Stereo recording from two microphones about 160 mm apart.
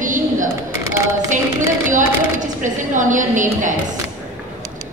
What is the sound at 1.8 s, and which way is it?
A woman's voice, 50° right (ahead or behind).